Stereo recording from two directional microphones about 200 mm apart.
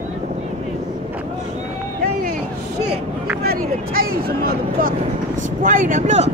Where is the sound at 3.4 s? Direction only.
50° right (ahead or behind).